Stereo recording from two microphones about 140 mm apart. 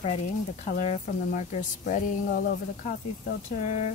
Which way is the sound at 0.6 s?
60° left (ahead or behind).